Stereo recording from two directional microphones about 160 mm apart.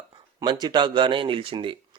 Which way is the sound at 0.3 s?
25° right (ahead or behind).